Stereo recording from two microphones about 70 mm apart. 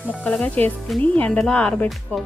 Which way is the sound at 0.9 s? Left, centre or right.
Centre.